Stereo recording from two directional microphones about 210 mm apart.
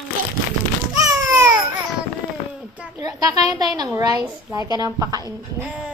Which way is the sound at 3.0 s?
15° right (ahead or behind).